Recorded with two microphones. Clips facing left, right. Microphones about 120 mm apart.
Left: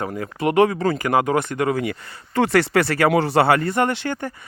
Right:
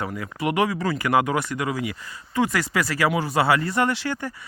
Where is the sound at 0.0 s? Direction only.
35° left (ahead or behind).